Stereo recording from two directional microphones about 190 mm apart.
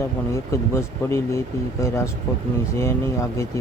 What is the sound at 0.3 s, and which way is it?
Speech, 15° left (ahead or behind).